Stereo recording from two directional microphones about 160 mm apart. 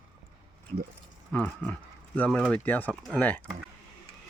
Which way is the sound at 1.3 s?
10° left (ahead or behind).